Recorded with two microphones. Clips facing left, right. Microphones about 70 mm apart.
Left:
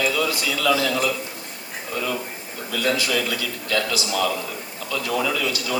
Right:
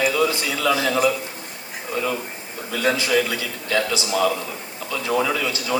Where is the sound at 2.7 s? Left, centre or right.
Right.